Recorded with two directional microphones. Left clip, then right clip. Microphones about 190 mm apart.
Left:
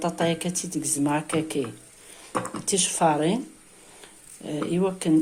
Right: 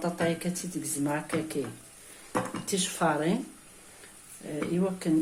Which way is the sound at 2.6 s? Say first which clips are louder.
Left 8 dB; 30° left (ahead or behind).